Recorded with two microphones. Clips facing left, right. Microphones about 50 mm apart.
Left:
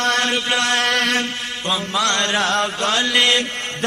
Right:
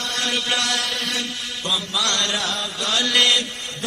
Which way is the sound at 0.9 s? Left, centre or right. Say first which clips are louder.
Left 8 dB; left.